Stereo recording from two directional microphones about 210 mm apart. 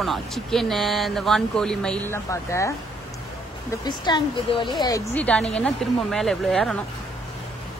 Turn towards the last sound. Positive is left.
turn(degrees=0)  # may be behind; listen again after turning